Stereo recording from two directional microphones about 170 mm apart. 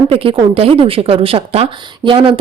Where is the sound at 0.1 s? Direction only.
30° right (ahead or behind).